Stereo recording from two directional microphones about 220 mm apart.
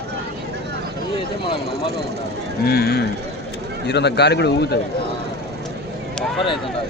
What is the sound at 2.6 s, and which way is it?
A man's voice, 45° left (ahead or behind).